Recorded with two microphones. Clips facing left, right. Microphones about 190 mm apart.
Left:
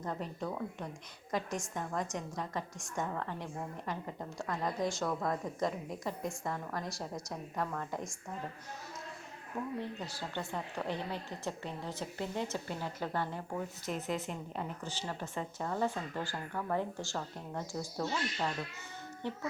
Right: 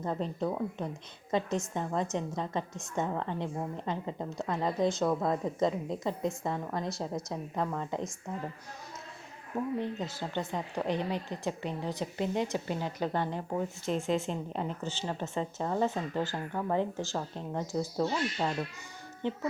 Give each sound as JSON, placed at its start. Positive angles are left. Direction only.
{"t": 0.0, "sound": "a woman's voice", "side_deg": -25}
{"t": 9.8, "sound": "a woman's voice", "side_deg": -20}
{"t": 19.2, "sound": "a woman's voice", "side_deg": -20}